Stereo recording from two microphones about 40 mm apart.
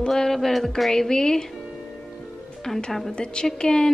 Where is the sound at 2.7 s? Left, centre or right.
Centre.